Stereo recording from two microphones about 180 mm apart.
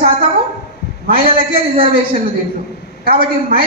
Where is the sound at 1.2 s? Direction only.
30° right (ahead or behind).